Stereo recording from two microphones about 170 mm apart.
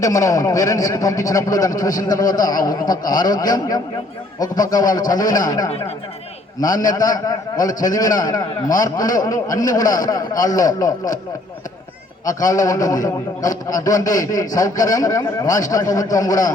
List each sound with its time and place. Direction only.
0.0 s a man's voice: 20° left (ahead or behind)
12.2 s a man's voice: 20° left (ahead or behind)